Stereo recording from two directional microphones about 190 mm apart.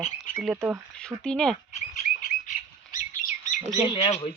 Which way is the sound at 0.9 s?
5° left (ahead or behind).